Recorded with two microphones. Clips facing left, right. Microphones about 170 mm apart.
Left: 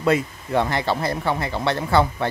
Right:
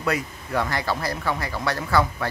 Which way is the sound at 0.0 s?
25° left (ahead or behind).